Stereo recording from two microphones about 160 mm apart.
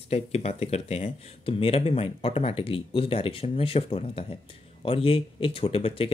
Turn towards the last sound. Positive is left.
turn(degrees=35)  # may be behind; listen again after turning